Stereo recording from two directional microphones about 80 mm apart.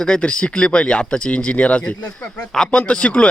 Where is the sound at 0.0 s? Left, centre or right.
Centre.